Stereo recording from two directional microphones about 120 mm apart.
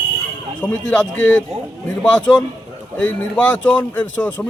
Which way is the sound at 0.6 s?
10° left (ahead or behind).